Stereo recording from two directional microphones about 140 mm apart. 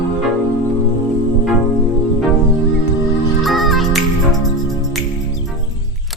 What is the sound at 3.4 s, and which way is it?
Music, centre (ahead or behind).